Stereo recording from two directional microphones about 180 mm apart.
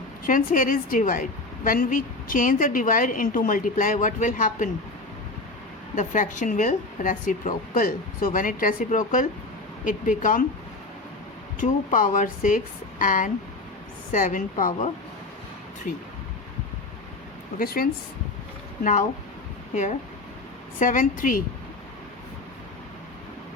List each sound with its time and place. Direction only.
0.3 s a woman's voice: 50° left (ahead or behind)
6.0 s a woman's voice: 45° left (ahead or behind)
11.6 s a woman's voice: 45° left (ahead or behind)
18.8 s a woman's voice: 45° left (ahead or behind)